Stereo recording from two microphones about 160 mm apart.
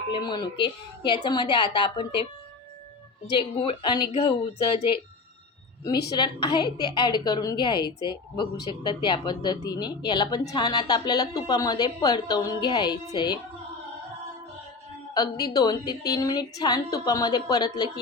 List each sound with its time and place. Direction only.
0.1 s a woman's voice: 30° left (ahead or behind)
3.3 s speech: 30° left (ahead or behind)
6.1 s a woman's voice: 25° left (ahead or behind)
15.1 s a woman's voice: 25° left (ahead or behind)